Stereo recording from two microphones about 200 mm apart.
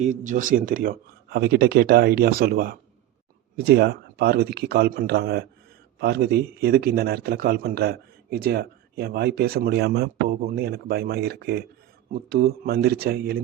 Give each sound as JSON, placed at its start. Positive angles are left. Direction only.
{"t": 0.0, "sound": "speech", "side_deg": -40}